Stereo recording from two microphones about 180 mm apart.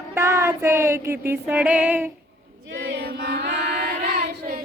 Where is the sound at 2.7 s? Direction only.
70° right (ahead or behind).